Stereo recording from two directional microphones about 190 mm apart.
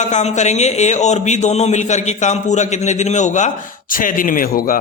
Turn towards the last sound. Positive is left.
turn(degrees=50)  # may be behind; listen again after turning